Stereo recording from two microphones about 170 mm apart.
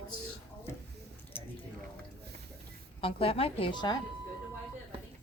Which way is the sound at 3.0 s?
35° left (ahead or behind).